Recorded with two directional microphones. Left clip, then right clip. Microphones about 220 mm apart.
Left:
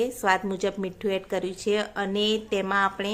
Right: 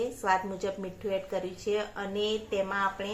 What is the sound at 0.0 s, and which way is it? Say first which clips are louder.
A woman's voice: left 4 dB; 45° left (ahead or behind).